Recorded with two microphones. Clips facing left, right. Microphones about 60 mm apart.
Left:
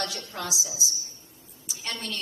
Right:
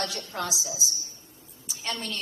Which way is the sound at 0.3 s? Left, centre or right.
Right.